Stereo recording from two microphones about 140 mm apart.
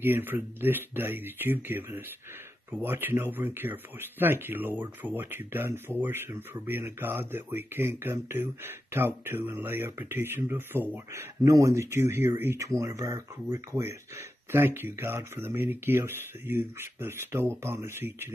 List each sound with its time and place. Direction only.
0.0 s speech: 15° right (ahead or behind)